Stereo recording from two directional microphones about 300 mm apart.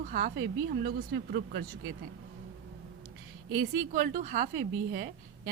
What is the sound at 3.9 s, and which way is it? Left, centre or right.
A woman's voice, right.